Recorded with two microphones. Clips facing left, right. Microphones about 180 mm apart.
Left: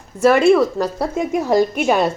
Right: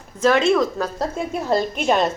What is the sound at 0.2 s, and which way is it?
A woman's voice, 10° left (ahead or behind).